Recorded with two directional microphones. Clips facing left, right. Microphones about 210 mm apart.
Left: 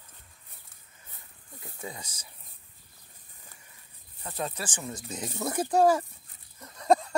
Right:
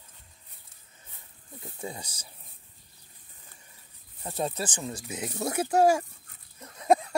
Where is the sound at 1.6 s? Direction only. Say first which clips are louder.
Right 3 dB; 30° right (ahead or behind).